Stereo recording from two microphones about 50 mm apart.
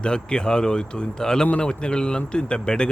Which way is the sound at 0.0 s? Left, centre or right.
Centre.